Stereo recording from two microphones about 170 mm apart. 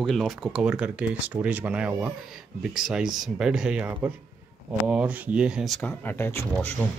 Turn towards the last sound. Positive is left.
turn(degrees=5)  # may be behind; listen again after turning